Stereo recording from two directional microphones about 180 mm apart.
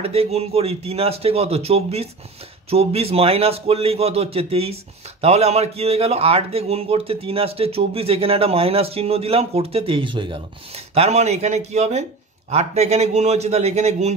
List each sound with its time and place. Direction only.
0.0 s a man's voice: 35° right (ahead or behind)